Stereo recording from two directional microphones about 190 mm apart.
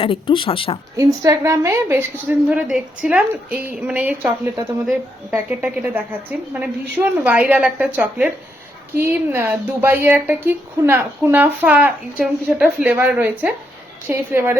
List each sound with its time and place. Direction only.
0.0 s speech: 30° left (ahead or behind)
0.9 s a woman's voice: 15° right (ahead or behind)